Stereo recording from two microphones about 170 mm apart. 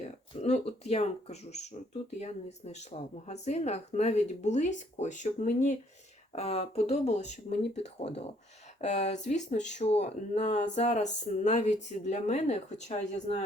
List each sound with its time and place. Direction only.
0.4 s speech: 40° left (ahead or behind)